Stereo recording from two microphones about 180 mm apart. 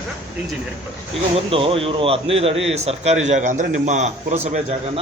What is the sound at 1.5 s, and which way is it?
A man's voice, 30° right (ahead or behind).